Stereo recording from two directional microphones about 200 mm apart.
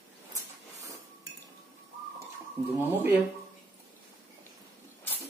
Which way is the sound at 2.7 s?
10° right (ahead or behind).